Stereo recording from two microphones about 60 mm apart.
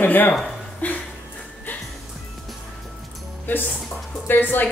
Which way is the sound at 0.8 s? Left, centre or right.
Left.